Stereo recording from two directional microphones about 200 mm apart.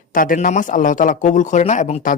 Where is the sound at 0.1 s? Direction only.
45° left (ahead or behind).